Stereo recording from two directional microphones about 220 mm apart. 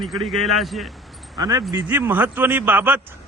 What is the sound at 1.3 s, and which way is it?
Speech, 15° right (ahead or behind).